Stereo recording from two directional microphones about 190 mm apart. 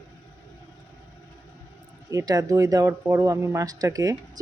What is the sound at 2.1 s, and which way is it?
Speech, 20° right (ahead or behind).